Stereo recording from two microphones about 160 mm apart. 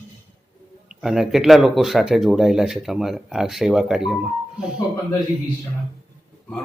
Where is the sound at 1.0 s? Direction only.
Centre (ahead or behind).